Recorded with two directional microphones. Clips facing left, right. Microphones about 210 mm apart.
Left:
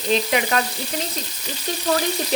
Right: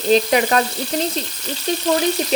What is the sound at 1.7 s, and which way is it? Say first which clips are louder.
Frying: right 6 dB; 20° right (ahead or behind).